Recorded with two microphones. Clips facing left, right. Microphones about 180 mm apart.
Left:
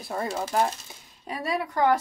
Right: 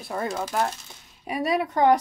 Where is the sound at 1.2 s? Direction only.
15° right (ahead or behind).